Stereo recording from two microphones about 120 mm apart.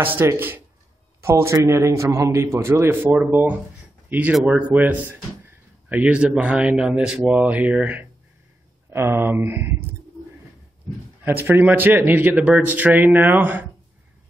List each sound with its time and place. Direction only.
0.0 s a man's voice: 20° right (ahead or behind)
11.2 s speech: 15° right (ahead or behind)